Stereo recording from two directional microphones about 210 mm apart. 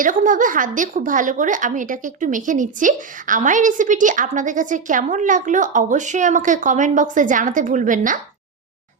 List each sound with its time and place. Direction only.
0.0 s a woman's voice: 40° right (ahead or behind)